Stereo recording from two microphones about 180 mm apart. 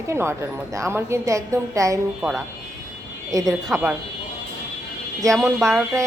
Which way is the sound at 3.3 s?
20° right (ahead or behind).